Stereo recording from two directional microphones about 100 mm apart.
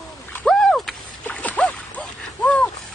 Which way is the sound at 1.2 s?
15° left (ahead or behind).